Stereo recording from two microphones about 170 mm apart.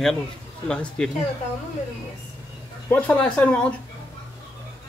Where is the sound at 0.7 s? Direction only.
5° left (ahead or behind).